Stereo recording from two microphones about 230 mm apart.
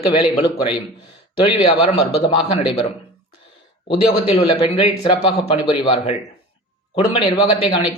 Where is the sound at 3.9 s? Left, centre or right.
Left.